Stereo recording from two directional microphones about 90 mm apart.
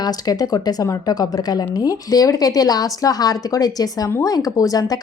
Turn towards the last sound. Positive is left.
turn(degrees=45)  # may be behind; listen again after turning